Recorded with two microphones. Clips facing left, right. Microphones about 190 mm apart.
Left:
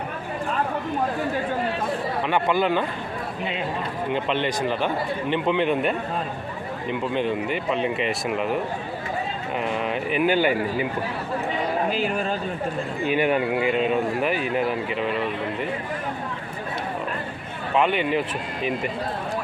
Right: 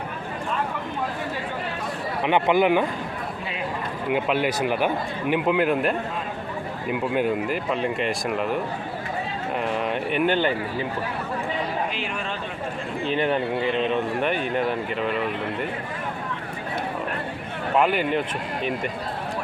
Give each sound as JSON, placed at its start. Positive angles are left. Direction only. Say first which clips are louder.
{"t": 2.2, "sound": "speech", "louder": "right 4 dB", "side_deg": -20}
{"t": 4.1, "sound": "speech", "louder": "right 2 dB", "side_deg": -5}
{"t": 9.6, "sound": "speech", "louder": "even", "side_deg": 0}
{"t": 11.9, "sound": "speech", "louder": "left 6 dB", "side_deg": 40}
{"t": 13.1, "sound": "speech", "louder": "left 2 dB", "side_deg": 10}
{"t": 17.7, "sound": "speech", "louder": "even", "side_deg": 0}